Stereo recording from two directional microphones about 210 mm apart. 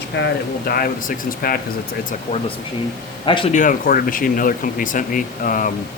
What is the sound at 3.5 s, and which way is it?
Speech, 40° left (ahead or behind).